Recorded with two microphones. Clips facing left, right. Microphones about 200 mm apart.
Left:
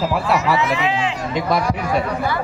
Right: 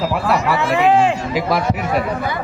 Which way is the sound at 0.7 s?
55° right (ahead or behind).